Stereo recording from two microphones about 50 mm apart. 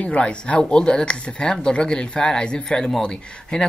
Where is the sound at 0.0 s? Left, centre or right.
Left.